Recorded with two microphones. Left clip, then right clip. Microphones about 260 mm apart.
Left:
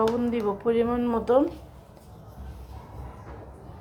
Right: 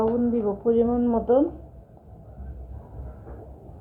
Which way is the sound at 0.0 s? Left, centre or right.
Left.